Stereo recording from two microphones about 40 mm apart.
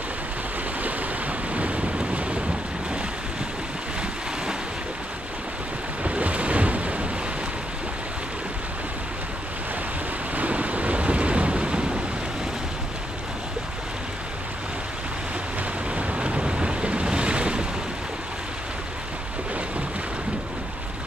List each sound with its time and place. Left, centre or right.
0.8 s wind: right
6.0 s ocean: right
10.3 s waves: right
15.9 s waves: right